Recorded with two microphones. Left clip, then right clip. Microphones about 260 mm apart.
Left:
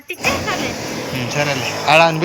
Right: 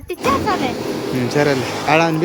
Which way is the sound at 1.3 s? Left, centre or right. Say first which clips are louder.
Right 2 dB; centre.